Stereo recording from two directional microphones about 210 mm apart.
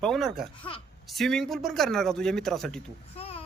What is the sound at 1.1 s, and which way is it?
Speech, centre (ahead or behind).